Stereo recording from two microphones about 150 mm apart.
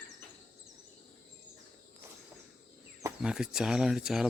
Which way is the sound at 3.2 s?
5° right (ahead or behind).